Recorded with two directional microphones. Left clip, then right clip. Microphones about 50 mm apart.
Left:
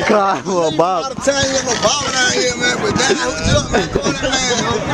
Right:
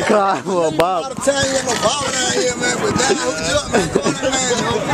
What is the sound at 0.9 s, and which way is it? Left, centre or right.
Speech, left.